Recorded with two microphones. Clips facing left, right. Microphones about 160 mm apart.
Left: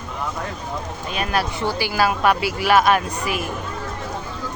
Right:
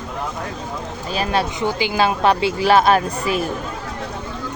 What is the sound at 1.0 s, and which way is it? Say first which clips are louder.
Speech: right 3 dB; 30° right (ahead or behind).